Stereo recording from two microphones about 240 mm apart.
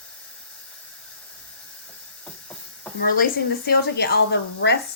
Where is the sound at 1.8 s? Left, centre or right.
Centre.